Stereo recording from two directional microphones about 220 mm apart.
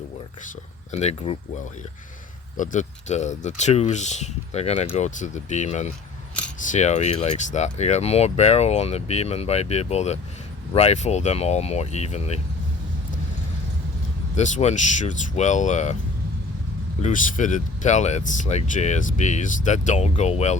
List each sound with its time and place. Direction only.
0.9 s speech: 30° left (ahead or behind)
2.6 s speech: 35° left (ahead or behind)
14.3 s speech: 30° left (ahead or behind)
17.0 s speech: 35° left (ahead or behind)